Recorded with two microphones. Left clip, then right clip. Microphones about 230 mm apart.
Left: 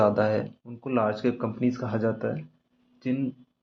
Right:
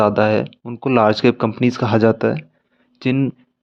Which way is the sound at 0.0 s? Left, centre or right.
Right.